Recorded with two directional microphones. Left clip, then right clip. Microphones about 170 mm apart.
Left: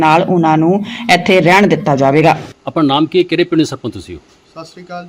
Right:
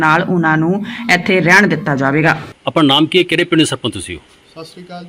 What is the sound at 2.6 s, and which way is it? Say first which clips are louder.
A man's voice: right 2 dB; centre (ahead or behind).